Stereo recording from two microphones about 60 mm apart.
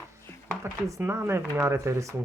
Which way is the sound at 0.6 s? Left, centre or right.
Right.